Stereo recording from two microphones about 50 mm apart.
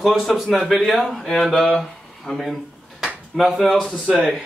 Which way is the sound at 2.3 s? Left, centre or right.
Centre.